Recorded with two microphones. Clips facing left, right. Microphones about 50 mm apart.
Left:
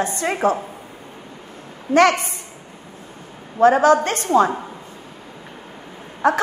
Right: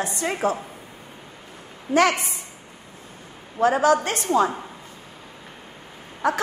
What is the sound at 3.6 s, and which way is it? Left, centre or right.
Speech, left.